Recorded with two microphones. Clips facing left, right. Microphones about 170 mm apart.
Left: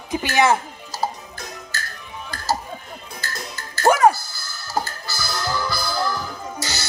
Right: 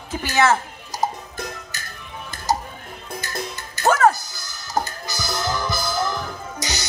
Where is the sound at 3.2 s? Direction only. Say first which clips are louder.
Right 3 dB; 20° right (ahead or behind).